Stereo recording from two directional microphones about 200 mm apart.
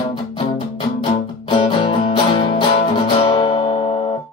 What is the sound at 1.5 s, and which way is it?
Music, 25° left (ahead or behind).